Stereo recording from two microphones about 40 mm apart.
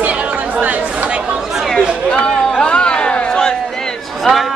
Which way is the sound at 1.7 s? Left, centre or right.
Left.